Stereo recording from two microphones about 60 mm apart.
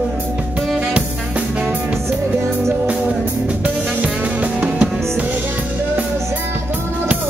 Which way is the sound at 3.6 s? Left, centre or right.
Right.